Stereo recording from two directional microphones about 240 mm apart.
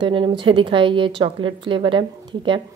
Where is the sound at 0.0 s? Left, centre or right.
Right.